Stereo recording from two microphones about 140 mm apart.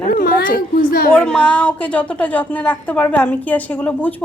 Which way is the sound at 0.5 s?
90° left.